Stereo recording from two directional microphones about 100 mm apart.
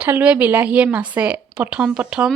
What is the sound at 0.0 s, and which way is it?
A woman's voice, 15° right (ahead or behind).